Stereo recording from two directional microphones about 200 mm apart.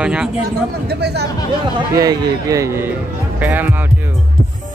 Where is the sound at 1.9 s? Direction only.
15° right (ahead or behind).